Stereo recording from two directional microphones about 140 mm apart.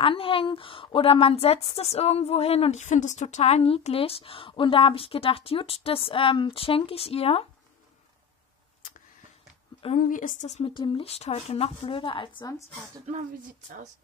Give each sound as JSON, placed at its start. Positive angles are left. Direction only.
{"t": 0.0, "sound": "a woman's voice", "side_deg": 40}
{"t": 9.9, "sound": "a woman's voice", "side_deg": 70}
{"t": 10.6, "sound": "a woman's voice", "side_deg": 35}